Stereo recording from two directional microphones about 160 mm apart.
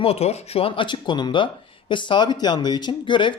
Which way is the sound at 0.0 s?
40° left (ahead or behind).